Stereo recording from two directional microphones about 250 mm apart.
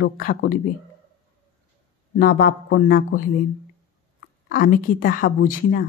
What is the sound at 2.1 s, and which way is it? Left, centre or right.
Speech, left.